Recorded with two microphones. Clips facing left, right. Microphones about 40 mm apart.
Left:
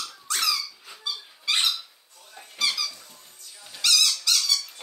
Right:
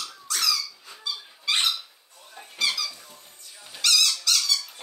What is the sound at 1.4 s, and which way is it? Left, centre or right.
Squeak, centre.